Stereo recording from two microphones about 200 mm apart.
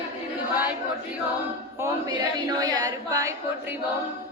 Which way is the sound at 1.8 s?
20° right (ahead or behind).